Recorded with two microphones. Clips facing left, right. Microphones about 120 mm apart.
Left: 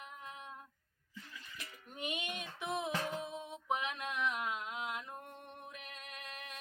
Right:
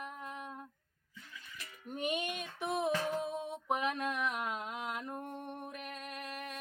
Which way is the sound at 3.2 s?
40° right (ahead or behind).